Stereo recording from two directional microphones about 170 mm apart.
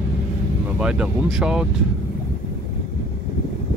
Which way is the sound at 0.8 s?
5° right (ahead or behind).